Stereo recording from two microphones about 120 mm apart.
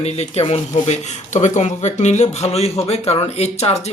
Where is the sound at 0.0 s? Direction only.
60° left (ahead or behind).